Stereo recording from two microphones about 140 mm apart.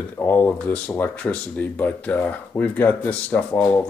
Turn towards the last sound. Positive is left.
turn(degrees=10)  # may be behind; listen again after turning